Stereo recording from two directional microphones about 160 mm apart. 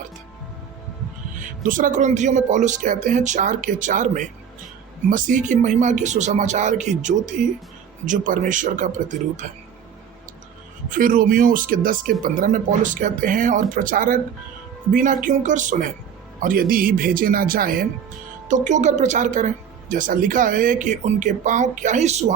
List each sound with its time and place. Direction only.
1.6 s speech: 55° right (ahead or behind)
10.8 s speech: 55° right (ahead or behind)
16.4 s speech: 60° right (ahead or behind)
18.4 s speech: 50° right (ahead or behind)